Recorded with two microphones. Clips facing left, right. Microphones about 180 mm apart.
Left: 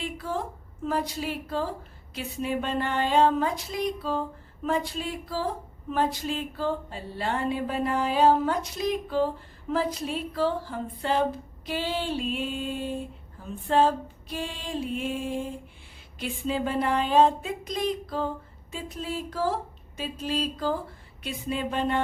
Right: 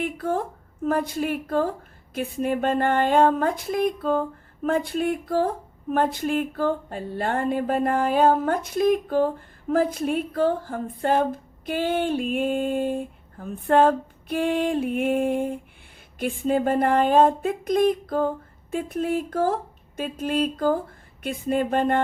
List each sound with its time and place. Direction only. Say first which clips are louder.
0.0 s speech: right 6 dB; 55° right (ahead or behind)